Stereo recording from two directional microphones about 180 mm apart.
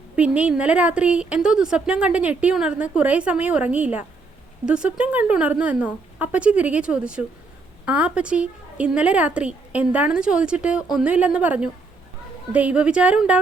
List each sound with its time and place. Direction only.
0.2 s a woman's voice: 5° right (ahead or behind)